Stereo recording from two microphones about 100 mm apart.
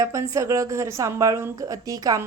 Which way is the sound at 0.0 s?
30° right (ahead or behind).